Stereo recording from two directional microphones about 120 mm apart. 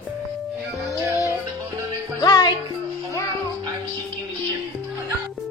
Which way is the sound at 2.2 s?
35° left (ahead or behind).